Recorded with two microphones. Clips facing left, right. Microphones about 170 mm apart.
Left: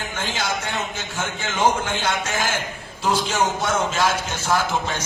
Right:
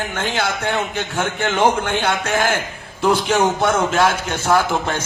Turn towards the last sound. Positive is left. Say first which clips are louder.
# right 5 dB
turn(degrees=-55)  # may be behind; listen again after turning